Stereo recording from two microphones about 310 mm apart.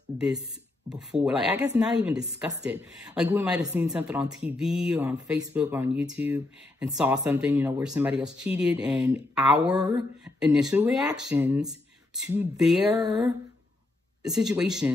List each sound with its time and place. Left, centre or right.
0.9 s speech: centre